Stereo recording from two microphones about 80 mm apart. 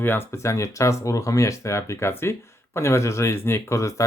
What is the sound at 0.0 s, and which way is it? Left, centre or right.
Speech, left.